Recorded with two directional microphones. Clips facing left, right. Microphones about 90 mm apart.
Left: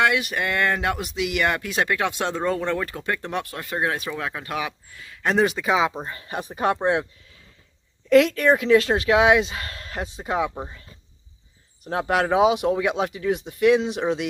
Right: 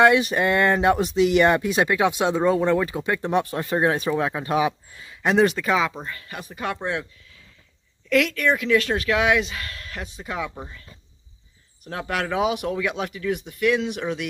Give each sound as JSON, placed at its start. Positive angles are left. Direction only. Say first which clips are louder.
{"t": 0.0, "sound": "speech", "louder": "right 5 dB", "side_deg": -25}
{"t": 5.2, "sound": "speech", "louder": "right 2 dB", "side_deg": 0}
{"t": 8.1, "sound": "speech", "louder": "left 4 dB", "side_deg": 30}